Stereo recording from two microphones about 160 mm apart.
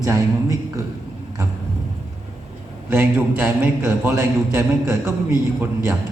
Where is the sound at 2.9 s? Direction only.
15° right (ahead or behind).